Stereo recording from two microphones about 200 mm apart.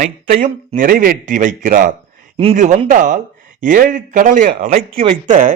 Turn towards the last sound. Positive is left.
turn(degrees=-40)  # may be behind; listen again after turning